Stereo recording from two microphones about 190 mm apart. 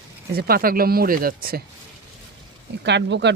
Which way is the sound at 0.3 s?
50° right (ahead or behind).